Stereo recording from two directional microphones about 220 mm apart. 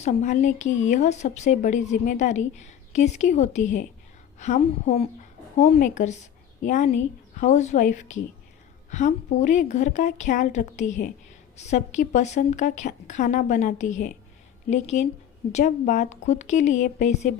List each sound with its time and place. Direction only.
0.0 s speech: 30° left (ahead or behind)